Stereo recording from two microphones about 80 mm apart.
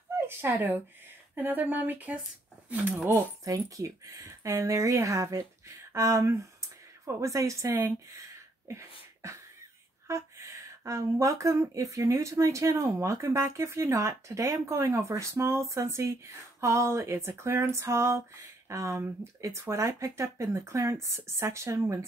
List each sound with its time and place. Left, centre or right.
0.4 s speech: right
3.4 s speech: right